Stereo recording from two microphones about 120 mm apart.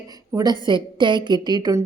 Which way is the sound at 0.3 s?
40° right (ahead or behind).